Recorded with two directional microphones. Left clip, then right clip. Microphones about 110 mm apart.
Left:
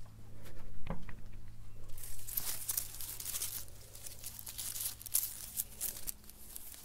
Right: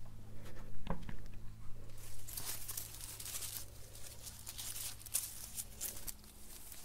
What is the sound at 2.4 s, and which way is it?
Crumpling, 25° left (ahead or behind).